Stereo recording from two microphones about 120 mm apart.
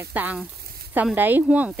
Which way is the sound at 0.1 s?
15° right (ahead or behind).